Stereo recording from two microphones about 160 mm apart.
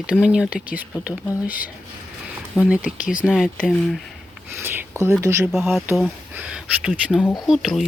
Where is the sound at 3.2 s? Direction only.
5° left (ahead or behind).